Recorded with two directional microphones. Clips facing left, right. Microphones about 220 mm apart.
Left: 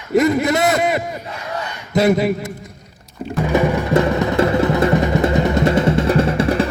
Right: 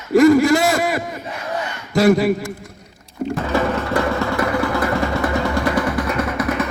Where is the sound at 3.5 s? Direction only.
15° left (ahead or behind).